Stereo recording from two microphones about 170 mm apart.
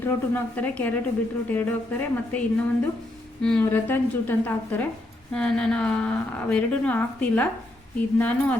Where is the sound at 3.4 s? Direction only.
10° left (ahead or behind).